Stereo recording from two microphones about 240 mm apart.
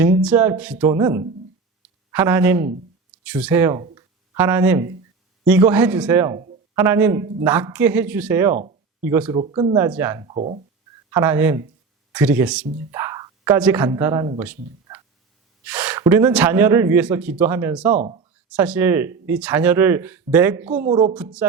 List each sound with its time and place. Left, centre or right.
0.0 s speech: centre
3.9 s a sound: centre
5.5 s speech: centre
8.5 s a sound: right
9.0 s a woman's voice: centre
9.3 s speech: right
9.7 s speech: centre
10.2 s speech: right
11.1 s speech: centre
17.9 s speech: right
18.5 s a woman's voice: centre